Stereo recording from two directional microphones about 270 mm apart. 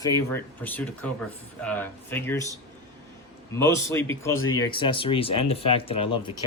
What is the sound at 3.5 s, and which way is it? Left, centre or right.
Speech, centre.